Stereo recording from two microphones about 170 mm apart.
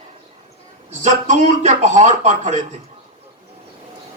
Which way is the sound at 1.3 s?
45° right (ahead or behind).